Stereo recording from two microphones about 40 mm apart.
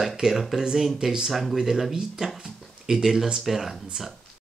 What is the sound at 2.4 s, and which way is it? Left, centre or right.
A man's voice, centre.